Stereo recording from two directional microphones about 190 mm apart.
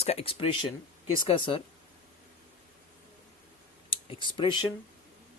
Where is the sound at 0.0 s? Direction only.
35° left (ahead or behind).